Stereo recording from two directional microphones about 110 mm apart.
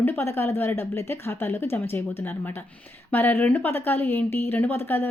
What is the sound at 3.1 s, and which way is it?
Speech, 15° left (ahead or behind).